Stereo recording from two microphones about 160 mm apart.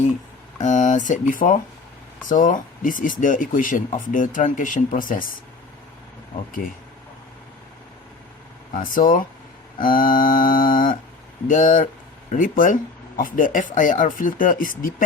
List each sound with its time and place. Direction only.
0.6 s speech: 50° left (ahead or behind)
8.7 s speech: 60° left (ahead or behind)
9.8 s mantra: 60° left (ahead or behind)
11.4 s speech: 55° left (ahead or behind)